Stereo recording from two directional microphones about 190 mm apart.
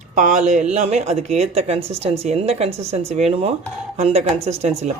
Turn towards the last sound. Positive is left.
turn(degrees=-35)  # may be behind; listen again after turning